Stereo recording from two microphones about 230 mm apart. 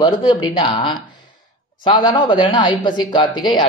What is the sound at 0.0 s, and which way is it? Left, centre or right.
Speech, centre.